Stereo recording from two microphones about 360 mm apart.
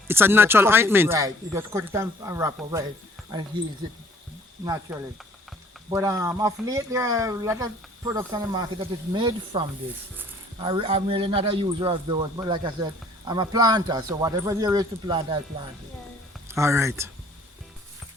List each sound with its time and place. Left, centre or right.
0.1 s speech: centre
4.6 s speech: centre
16.5 s speech: centre